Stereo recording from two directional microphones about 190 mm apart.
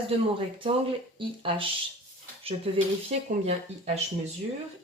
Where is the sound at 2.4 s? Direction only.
30° right (ahead or behind).